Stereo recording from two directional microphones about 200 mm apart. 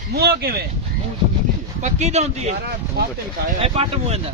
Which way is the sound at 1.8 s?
35° right (ahead or behind).